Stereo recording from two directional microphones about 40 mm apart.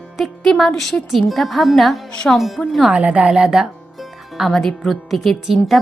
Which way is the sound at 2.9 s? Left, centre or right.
Right.